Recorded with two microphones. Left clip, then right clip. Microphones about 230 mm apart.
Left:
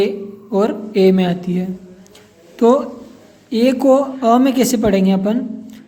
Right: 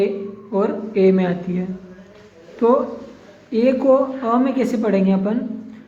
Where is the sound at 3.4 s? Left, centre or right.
Left.